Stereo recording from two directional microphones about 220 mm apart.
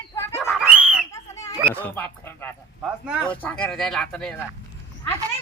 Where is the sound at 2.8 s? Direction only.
5° right (ahead or behind).